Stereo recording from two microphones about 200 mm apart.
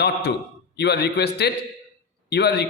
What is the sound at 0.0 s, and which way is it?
A man's voice, 55° left (ahead or behind).